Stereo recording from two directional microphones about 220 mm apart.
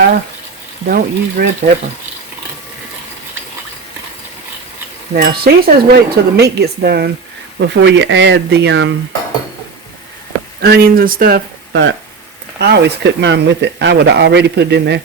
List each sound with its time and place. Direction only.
0.9 s speech: 40° right (ahead or behind)
5.1 s speech: 40° right (ahead or behind)
10.6 s speech: 45° right (ahead or behind)